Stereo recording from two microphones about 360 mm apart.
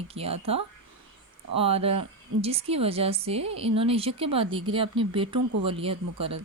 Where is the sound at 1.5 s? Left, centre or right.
Centre.